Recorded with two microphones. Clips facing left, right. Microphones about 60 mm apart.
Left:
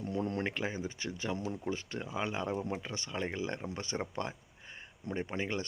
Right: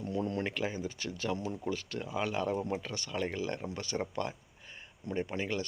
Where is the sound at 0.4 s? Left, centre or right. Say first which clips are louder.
Right 1 dB; left.